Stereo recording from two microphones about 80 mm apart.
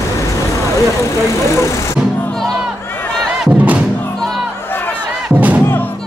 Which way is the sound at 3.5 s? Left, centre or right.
Centre.